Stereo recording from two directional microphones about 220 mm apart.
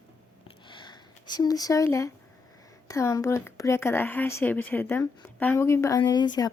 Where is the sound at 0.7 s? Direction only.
20° left (ahead or behind).